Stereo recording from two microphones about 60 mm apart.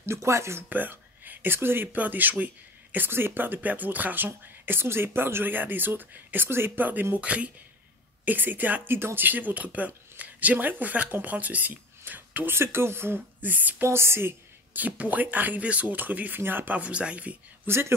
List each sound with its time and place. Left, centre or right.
0.0 s speech: right
0.7 s speech: right
4.3 s speech: right
12.5 s speech: right
13.8 s speech: right
14.7 s speech: right
17.6 s speech: right